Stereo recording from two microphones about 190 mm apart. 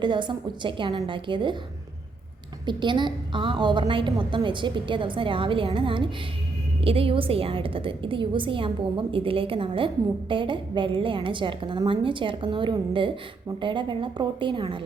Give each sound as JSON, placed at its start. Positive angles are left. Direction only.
{"t": 0.0, "sound": "a woman's voice", "side_deg": -25}
{"t": 2.6, "sound": "a woman's voice", "side_deg": -25}